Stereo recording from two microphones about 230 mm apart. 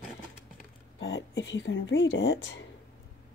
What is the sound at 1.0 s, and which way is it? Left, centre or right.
Speech, left.